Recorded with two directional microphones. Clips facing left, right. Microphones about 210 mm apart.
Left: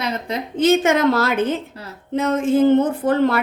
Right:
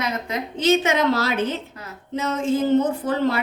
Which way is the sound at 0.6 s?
50° left (ahead or behind).